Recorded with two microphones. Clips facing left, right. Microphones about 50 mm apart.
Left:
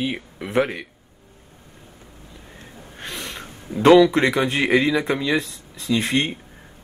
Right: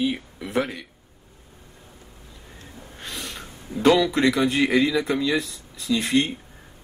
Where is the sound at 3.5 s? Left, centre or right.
Centre.